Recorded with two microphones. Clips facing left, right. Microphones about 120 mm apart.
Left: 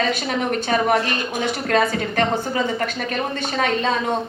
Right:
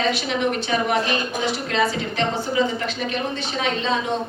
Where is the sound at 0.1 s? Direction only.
45° left (ahead or behind).